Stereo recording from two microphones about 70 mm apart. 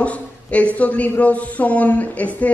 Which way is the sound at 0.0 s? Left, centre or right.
Centre.